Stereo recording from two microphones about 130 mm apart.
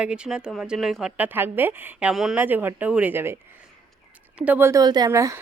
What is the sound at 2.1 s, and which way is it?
Speech, 5° right (ahead or behind).